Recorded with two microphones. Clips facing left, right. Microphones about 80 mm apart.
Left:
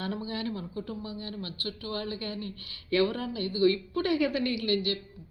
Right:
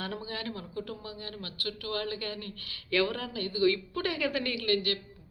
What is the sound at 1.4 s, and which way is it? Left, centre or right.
A woman's voice, left.